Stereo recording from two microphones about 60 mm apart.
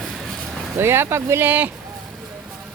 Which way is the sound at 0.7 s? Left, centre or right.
Right.